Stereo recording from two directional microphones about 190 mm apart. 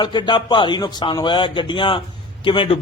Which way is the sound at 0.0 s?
25° left (ahead or behind).